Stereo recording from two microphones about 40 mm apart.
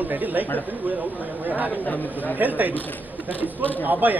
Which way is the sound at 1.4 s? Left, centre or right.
Right.